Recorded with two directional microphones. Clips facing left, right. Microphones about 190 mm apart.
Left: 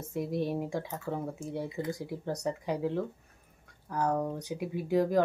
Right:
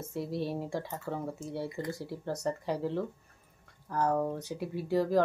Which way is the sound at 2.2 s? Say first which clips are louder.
Even; centre (ahead or behind).